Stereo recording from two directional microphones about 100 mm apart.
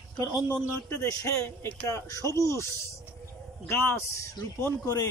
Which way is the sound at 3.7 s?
25° left (ahead or behind).